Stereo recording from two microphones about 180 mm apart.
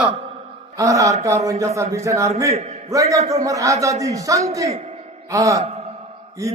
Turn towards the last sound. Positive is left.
turn(degrees=-15)  # may be behind; listen again after turning